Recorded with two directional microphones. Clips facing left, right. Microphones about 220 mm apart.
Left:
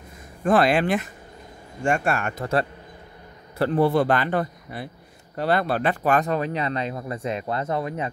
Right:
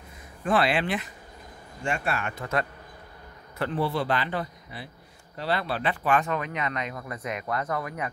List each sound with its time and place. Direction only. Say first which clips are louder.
0.4 s a man's voice: left 5 dB; 45° left (ahead or behind); by 8.1 s 25° left (ahead or behind)